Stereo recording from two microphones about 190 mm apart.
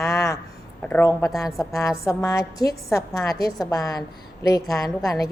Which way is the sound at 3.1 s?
Centre (ahead or behind).